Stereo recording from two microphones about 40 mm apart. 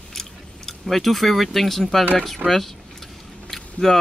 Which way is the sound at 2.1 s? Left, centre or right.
Centre.